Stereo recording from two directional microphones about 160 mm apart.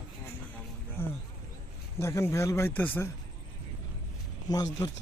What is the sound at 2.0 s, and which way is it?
Speech, 15° left (ahead or behind).